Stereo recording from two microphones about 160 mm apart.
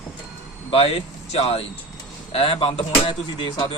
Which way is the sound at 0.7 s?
40° left (ahead or behind).